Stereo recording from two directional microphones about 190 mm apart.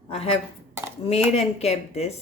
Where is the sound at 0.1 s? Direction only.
30° left (ahead or behind).